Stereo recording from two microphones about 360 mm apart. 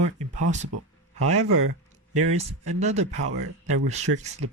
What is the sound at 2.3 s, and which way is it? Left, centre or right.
Speech, centre.